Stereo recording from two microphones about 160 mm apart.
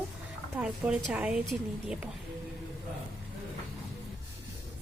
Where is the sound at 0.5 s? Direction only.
10° right (ahead or behind).